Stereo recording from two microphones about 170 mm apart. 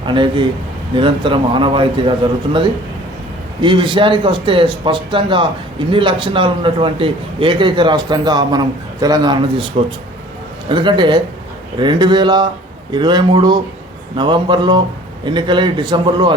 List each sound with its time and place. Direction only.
0.0 s a man's voice: 30° right (ahead or behind)